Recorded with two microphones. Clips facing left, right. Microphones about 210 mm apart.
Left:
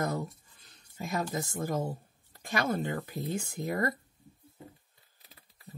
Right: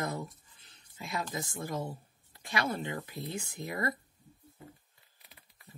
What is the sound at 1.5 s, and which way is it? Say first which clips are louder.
Speech: left 4 dB; 45° left (ahead or behind).